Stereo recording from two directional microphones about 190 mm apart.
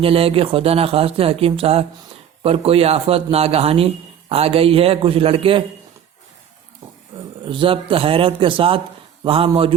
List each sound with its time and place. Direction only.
0.0 s a man's voice: 30° right (ahead or behind)
7.4 s a man's voice: 25° right (ahead or behind)